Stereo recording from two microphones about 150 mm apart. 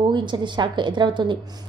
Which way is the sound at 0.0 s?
30° right (ahead or behind).